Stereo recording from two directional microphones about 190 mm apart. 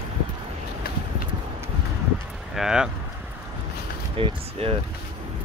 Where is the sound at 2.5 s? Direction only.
5° right (ahead or behind).